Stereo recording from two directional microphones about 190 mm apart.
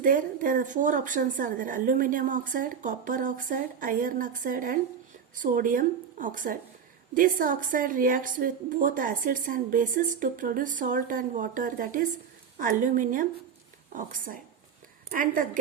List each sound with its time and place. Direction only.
0.0 s a woman's voice: 45° right (ahead or behind)